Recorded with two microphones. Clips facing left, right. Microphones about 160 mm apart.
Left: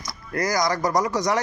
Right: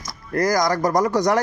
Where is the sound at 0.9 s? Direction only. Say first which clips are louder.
Right 4 dB; 55° right (ahead or behind).